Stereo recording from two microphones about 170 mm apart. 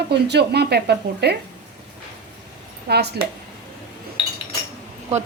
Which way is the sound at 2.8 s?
70° right (ahead or behind).